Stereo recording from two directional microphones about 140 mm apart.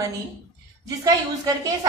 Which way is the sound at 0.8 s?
25° right (ahead or behind).